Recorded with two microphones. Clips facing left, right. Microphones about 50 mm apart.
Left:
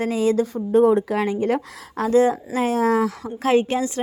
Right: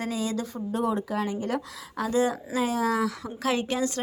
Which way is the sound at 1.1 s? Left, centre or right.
Left.